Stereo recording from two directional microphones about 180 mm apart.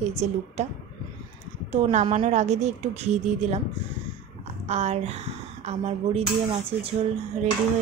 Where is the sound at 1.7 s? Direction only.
35° right (ahead or behind).